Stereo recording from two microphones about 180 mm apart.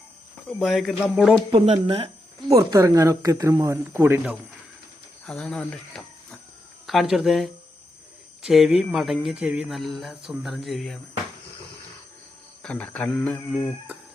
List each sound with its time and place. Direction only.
0.6 s speech: centre (ahead or behind)
1.5 s speech: 30° right (ahead or behind)
2.6 s speech: 20° right (ahead or behind)
5.2 s speech: 5° left (ahead or behind)
6.8 s speech: centre (ahead or behind)
12.6 s speech: 5° left (ahead or behind)